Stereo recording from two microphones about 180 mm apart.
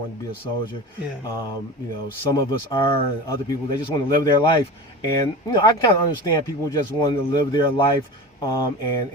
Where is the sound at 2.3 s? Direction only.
20° left (ahead or behind).